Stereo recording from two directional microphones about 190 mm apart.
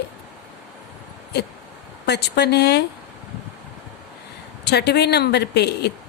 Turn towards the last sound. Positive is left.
turn(degrees=60)  # may be behind; listen again after turning